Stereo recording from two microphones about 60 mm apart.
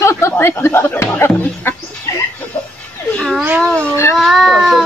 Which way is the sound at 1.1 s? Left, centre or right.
Left.